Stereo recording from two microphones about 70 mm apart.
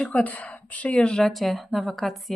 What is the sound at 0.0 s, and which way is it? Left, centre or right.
A woman's voice, centre.